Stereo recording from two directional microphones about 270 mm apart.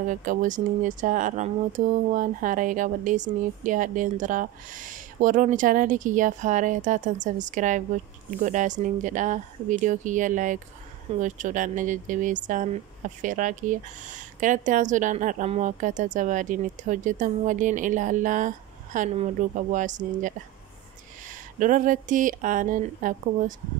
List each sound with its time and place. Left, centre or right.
0.1 s speech: right